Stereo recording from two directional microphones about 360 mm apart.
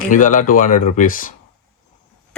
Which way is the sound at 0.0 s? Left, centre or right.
Left.